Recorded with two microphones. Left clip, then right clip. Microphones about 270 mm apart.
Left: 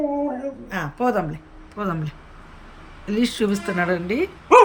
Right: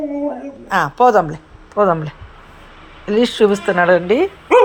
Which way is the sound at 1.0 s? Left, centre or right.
Right.